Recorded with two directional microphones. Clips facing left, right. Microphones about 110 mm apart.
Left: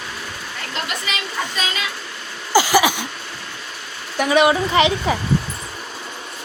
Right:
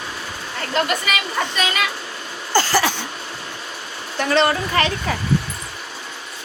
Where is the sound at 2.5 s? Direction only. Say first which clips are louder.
Left 3 dB; 10° left (ahead or behind).